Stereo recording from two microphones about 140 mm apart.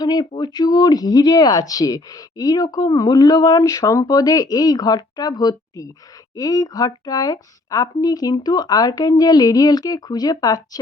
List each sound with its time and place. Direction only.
0.0 s speech: 30° left (ahead or behind)